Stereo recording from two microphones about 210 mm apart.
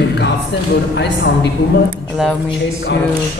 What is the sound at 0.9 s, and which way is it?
Speech, 55° left (ahead or behind).